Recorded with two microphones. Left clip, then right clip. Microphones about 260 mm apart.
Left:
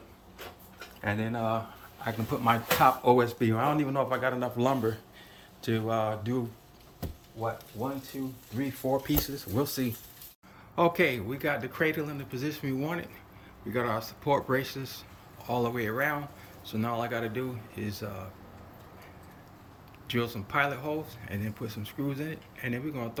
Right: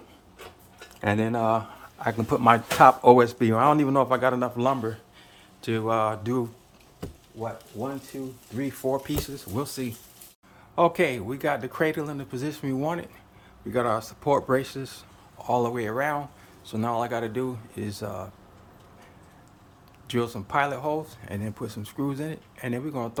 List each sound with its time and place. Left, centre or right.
1.0 s speech: right
8.5 s speech: centre
20.1 s speech: centre